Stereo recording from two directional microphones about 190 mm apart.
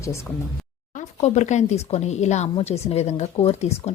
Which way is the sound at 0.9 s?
35° left (ahead or behind).